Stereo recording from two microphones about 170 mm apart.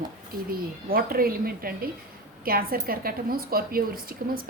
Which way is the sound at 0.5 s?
60° right (ahead or behind).